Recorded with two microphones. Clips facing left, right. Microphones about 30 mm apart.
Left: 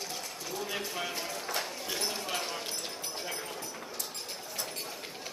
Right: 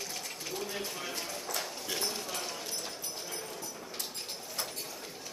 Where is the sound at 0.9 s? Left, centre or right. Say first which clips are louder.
Left 3 dB; left.